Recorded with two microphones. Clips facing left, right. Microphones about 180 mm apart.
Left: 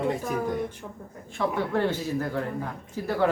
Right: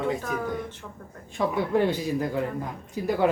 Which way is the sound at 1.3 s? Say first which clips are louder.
Right 2 dB; 15° right (ahead or behind).